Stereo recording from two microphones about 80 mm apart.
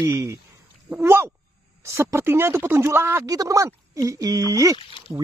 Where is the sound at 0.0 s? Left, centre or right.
Right.